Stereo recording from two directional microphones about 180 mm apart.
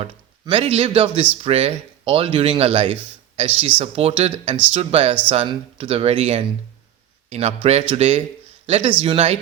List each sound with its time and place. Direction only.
0.0 s speech: 30° right (ahead or behind)